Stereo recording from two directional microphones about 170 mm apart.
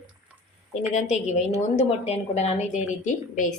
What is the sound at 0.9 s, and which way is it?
A woman's voice, 40° left (ahead or behind).